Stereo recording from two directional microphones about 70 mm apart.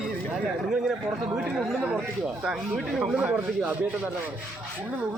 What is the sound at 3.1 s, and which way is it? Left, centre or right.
Speech, right.